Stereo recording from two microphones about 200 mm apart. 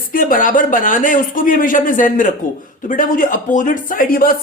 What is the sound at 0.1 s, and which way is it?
Speech, 45° left (ahead or behind).